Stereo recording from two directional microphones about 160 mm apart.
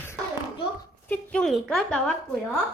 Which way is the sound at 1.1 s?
5° left (ahead or behind).